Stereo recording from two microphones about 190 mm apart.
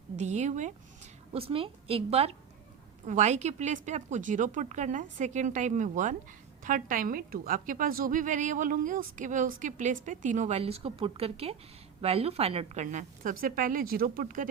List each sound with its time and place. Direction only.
0.2 s a woman's voice: 40° right (ahead or behind)